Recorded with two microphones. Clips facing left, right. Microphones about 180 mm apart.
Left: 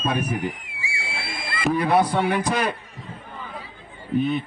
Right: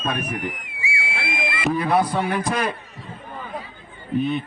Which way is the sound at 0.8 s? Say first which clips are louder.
Right 4 dB; 30° left (ahead or behind).